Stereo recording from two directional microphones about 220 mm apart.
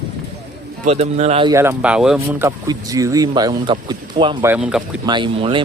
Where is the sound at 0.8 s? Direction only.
30° right (ahead or behind).